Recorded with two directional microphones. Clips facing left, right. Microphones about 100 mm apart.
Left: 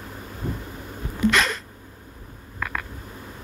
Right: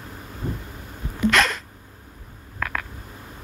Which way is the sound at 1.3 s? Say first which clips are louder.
Right 5 dB; centre (ahead or behind).